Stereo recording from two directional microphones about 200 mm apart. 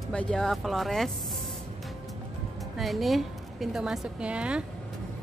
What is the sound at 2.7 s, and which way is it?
A woman's voice, centre (ahead or behind).